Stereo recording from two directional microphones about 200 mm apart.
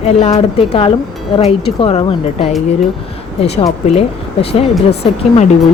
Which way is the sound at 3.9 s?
30° left (ahead or behind).